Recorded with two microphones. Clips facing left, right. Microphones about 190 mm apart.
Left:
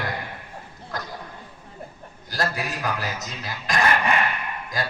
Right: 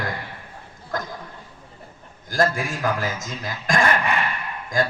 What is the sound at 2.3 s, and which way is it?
A man's voice, 50° right (ahead or behind).